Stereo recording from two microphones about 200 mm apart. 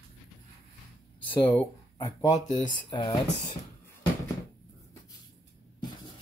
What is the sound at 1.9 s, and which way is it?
Speech, 25° left (ahead or behind).